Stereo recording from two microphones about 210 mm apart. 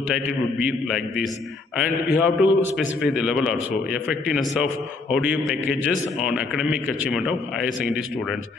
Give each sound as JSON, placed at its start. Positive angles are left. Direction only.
{"t": 0.1, "sound": "a man's voice", "side_deg": -5}